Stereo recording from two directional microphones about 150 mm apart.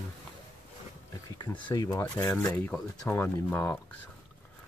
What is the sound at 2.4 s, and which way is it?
Speech, 10° left (ahead or behind).